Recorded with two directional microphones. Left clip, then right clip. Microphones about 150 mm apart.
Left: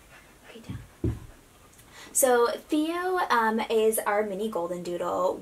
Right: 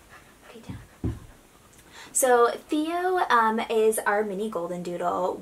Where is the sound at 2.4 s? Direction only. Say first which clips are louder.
Right 2 dB; 30° right (ahead or behind).